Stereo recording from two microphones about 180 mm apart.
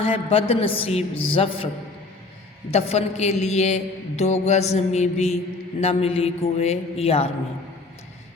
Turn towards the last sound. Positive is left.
turn(degrees=35)  # may be behind; listen again after turning